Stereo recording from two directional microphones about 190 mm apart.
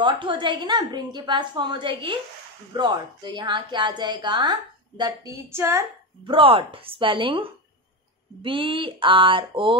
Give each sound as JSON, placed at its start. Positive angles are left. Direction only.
{"t": 0.0, "sound": "speech", "side_deg": -25}
{"t": 6.2, "sound": "speech", "side_deg": -30}